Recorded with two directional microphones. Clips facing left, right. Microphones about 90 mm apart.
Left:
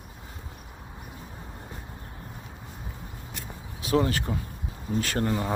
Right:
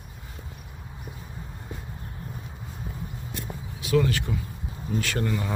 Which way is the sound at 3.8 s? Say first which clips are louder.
Right 1 dB; 35° left (ahead or behind).